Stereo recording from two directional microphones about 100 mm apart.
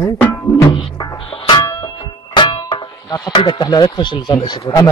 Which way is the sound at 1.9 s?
55° left (ahead or behind).